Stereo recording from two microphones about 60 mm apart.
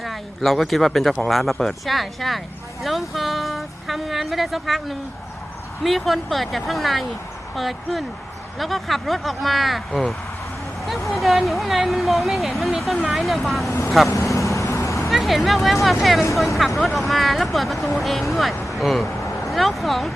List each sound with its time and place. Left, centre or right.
0.0 s speech: centre
14.3 s vehicle: left
15.1 s speech: centre